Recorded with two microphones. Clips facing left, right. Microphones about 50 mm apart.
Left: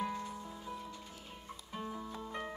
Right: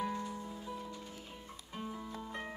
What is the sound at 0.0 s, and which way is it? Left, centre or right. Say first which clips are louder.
Music: right 1 dB; centre.